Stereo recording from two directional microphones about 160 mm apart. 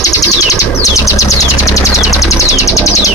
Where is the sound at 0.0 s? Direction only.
20° left (ahead or behind).